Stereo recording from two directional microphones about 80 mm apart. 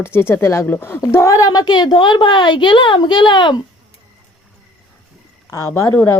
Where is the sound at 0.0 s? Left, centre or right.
Left.